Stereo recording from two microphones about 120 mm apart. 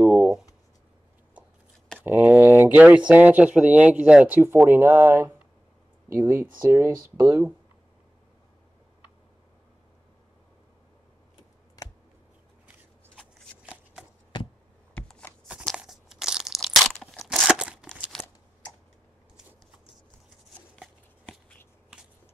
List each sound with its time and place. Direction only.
0.0 s shuffling cards: 5° right (ahead or behind)
2.0 s speech: 15° right (ahead or behind)
11.8 s computer keyboard: 30° left (ahead or behind)
13.6 s shuffling cards: 10° right (ahead or behind)
15.0 s shuffling cards: 10° left (ahead or behind)
15.6 s crunch: centre (ahead or behind)
18.1 s a sound: 5° left (ahead or behind)
20.7 s shuffling cards: 5° left (ahead or behind)